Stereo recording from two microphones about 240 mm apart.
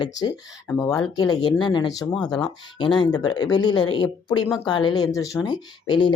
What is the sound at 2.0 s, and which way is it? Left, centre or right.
Speech, centre.